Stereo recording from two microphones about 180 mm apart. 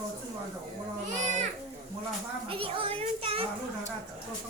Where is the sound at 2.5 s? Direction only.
30° right (ahead or behind).